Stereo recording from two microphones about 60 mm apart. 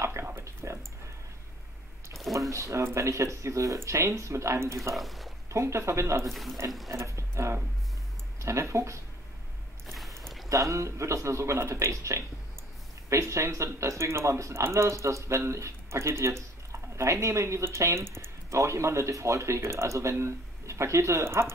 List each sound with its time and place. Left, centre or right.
0.0 s a sound: right
2.5 s speech: right
4.9 s speech: centre
5.5 s speech: right
6.9 s a sound: right
8.4 s speech: right
10.5 s speech: right